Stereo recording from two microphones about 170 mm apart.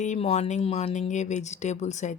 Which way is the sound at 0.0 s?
40° left (ahead or behind).